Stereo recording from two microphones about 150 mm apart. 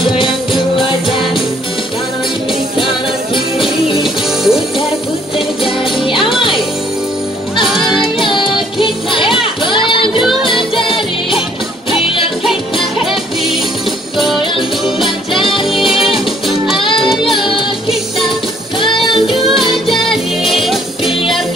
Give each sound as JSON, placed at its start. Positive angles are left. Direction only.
{"t": 0.5, "sound": "music", "side_deg": 0}
{"t": 3.3, "sound": "music", "side_deg": 35}
{"t": 4.0, "sound": "music", "side_deg": 0}
{"t": 7.6, "sound": "music", "side_deg": -5}
{"t": 8.2, "sound": "music", "side_deg": 35}
{"t": 9.4, "sound": "a sound", "side_deg": 35}
{"t": 15.6, "sound": "music", "side_deg": 0}
{"t": 16.8, "sound": "music", "side_deg": 35}
{"t": 18.8, "sound": "music", "side_deg": 35}
{"t": 20.6, "sound": "music", "side_deg": 0}